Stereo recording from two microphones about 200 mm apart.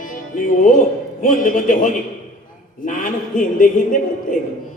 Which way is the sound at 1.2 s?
40° left (ahead or behind).